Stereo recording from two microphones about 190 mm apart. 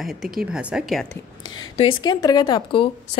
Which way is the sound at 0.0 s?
Centre (ahead or behind).